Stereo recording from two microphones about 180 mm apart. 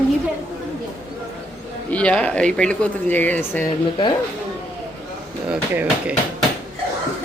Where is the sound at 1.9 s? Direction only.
5° left (ahead or behind).